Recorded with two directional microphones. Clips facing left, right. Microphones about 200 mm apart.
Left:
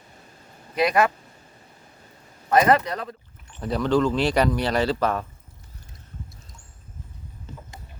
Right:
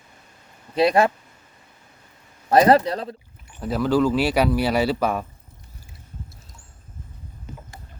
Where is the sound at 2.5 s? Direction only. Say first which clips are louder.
Right 3 dB; 35° right (ahead or behind).